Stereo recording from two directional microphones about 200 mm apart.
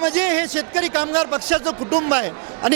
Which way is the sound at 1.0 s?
20° right (ahead or behind).